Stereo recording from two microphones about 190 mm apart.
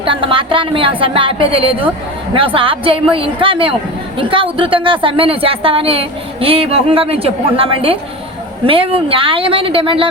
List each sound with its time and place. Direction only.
0.0 s speech: 25° right (ahead or behind)